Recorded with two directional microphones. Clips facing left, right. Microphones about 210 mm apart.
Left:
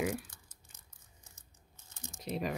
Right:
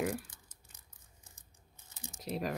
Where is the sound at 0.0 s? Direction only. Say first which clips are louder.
Even; centre (ahead or behind).